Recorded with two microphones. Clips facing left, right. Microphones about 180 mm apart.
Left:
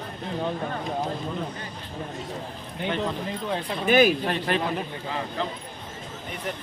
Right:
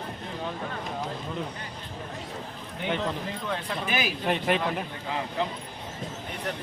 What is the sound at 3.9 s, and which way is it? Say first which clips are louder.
Speech: left 13 dB; 50° left (ahead or behind).